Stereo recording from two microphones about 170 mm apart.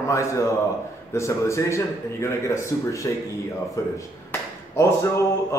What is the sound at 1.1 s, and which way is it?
Speech, 15° left (ahead or behind).